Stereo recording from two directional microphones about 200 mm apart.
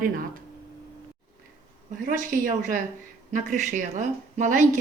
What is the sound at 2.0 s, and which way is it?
A woman's voice, 40° right (ahead or behind).